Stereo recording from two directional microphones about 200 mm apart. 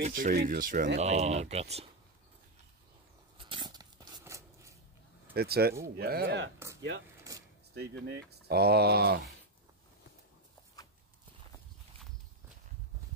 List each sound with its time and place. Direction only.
0.0 s speech: 40° right (ahead or behind)
3.3 s a sound: 25° right (ahead or behind)
5.3 s speech: 50° right (ahead or behind)
8.1 s speech: 55° right (ahead or behind)
10.8 s walk: 20° left (ahead or behind)